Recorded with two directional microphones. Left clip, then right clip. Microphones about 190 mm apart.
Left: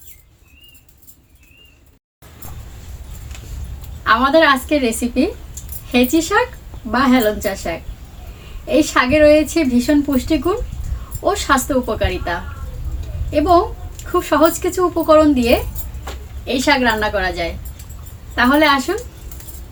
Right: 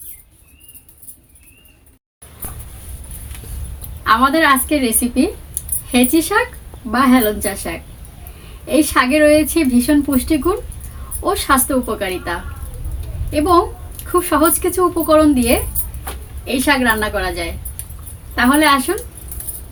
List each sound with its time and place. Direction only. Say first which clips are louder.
4.0 s a woman's voice: left 1 dB; 5° right (ahead or behind)